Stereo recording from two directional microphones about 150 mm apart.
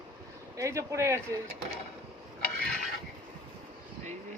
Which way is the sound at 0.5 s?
20° right (ahead or behind).